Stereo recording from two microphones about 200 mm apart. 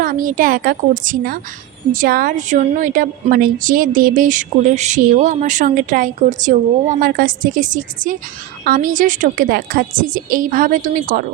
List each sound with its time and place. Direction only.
0.0 s a woman's voice: 45° right (ahead or behind)